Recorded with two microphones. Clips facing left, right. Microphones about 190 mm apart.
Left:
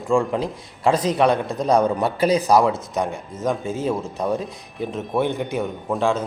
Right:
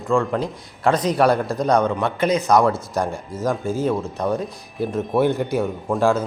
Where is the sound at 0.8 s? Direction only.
25° left (ahead or behind).